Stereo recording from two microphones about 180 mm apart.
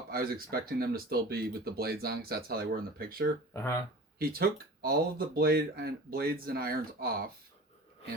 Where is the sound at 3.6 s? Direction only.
15° left (ahead or behind).